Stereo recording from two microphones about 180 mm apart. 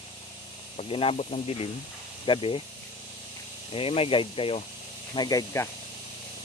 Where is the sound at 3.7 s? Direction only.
30° left (ahead or behind).